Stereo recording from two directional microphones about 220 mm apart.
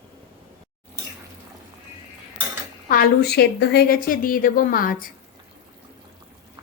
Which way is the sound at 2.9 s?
45° left (ahead or behind).